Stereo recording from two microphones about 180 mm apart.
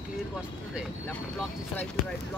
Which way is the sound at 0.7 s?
5° left (ahead or behind).